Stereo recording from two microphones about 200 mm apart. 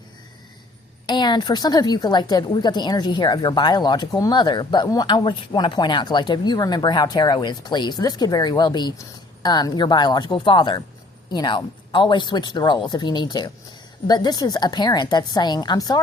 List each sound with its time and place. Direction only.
1.0 s a woman's voice: 20° left (ahead or behind)